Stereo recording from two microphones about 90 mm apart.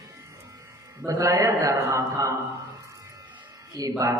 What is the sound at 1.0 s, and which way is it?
A man's voice, 40° right (ahead or behind).